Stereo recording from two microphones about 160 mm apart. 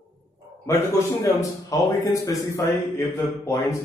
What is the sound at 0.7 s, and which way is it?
Speech, 20° left (ahead or behind).